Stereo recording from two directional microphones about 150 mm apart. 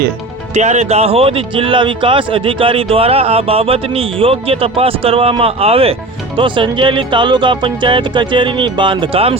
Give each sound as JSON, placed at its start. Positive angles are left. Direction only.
{"t": 0.5, "sound": "speech", "side_deg": -50}